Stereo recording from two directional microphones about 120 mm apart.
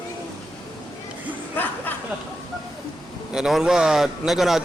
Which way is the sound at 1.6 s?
15° left (ahead or behind).